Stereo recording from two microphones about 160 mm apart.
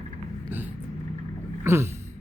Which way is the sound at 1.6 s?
15° right (ahead or behind).